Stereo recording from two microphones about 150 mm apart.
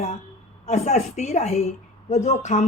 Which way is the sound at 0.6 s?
50° left (ahead or behind).